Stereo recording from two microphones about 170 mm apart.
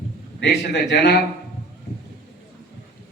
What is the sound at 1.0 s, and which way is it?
Speech, 70° left (ahead or behind).